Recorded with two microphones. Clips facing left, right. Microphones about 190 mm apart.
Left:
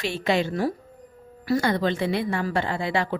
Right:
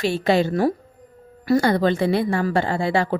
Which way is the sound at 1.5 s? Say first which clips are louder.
Right 5 dB; 35° right (ahead or behind).